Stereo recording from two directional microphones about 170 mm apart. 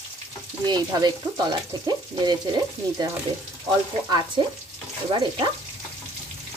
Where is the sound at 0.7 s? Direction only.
25° right (ahead or behind).